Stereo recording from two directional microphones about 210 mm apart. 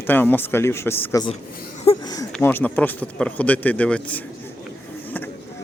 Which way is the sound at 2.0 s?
20° left (ahead or behind).